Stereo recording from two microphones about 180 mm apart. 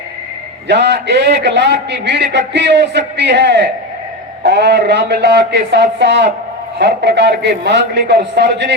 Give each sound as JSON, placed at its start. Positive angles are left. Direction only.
{"t": 0.7, "sound": "a man's voice", "side_deg": -75}